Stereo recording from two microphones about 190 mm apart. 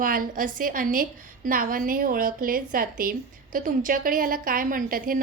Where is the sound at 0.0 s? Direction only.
45° right (ahead or behind).